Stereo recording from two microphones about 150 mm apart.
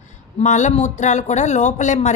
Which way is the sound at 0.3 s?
50° left (ahead or behind).